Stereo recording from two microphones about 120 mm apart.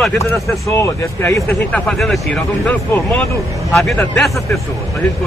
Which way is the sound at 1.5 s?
10° left (ahead or behind).